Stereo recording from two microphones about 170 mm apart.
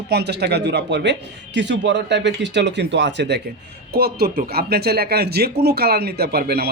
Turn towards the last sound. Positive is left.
turn(degrees=-65)  # may be behind; listen again after turning